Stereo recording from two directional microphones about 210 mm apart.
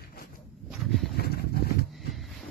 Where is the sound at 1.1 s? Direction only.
50° left (ahead or behind).